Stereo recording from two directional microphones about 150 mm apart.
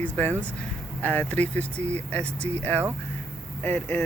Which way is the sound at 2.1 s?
10° left (ahead or behind).